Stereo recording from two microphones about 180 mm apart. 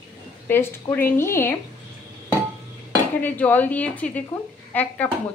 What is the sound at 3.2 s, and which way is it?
Speech, 10° left (ahead or behind).